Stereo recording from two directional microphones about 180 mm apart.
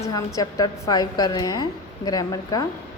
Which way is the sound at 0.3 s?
20° left (ahead or behind).